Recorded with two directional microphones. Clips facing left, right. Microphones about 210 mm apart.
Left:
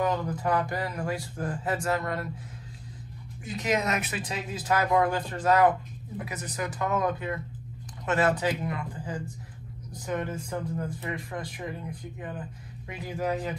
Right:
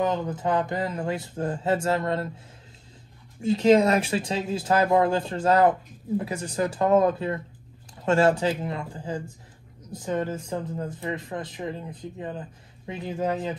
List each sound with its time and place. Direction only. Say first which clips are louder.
0.0 s speech: right 2 dB; 25° right (ahead or behind)
3.3 s speech: right 11 dB; 25° right (ahead or behind)